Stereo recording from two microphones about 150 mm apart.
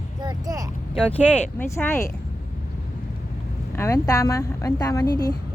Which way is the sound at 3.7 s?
20° left (ahead or behind).